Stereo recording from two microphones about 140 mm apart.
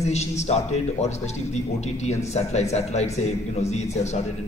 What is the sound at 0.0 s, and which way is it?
Speech, 50° left (ahead or behind).